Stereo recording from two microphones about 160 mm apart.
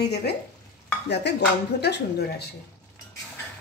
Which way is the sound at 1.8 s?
90° left.